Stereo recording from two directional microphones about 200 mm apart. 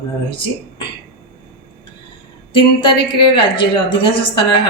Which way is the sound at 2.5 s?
25° left (ahead or behind).